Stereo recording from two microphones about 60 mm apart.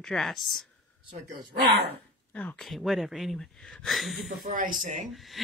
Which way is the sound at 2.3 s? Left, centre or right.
Left.